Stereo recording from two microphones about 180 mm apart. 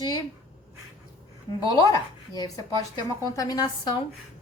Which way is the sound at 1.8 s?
20° left (ahead or behind).